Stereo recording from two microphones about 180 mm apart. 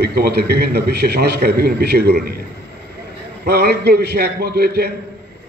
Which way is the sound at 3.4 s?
65° right (ahead or behind).